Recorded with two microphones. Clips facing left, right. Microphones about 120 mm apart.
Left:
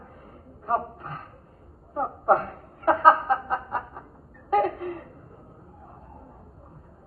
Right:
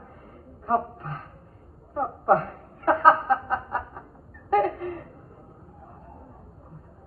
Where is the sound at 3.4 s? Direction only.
Centre (ahead or behind).